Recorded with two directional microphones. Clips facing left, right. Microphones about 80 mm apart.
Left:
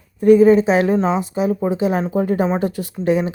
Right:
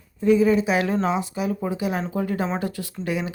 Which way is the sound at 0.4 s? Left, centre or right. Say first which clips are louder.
Left 7 dB; left.